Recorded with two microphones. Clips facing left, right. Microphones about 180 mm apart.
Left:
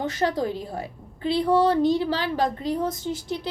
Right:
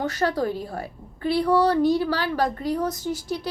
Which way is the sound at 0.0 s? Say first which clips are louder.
Right 1 dB; 20° left (ahead or behind).